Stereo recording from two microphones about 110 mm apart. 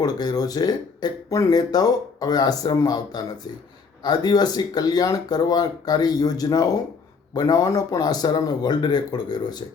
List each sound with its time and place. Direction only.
0.0 s speech: 35° left (ahead or behind)